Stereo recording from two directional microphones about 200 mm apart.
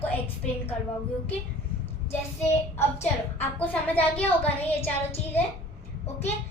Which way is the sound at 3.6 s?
10° left (ahead or behind).